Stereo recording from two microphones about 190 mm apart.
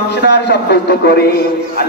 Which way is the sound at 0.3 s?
60° left (ahead or behind).